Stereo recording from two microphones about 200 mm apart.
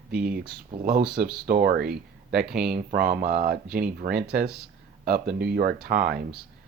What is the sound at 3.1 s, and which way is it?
Speech, 50° right (ahead or behind).